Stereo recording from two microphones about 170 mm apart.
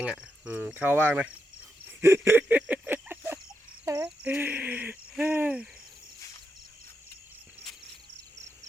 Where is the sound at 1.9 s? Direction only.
15° right (ahead or behind).